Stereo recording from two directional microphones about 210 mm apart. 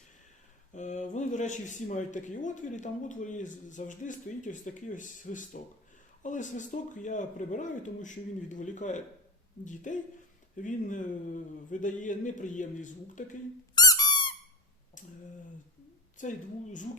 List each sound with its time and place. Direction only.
0.7 s speech: 35° left (ahead or behind)
13.7 s squeak: 20° left (ahead or behind)
15.0 s a sound: 35° left (ahead or behind)
16.1 s speech: 35° left (ahead or behind)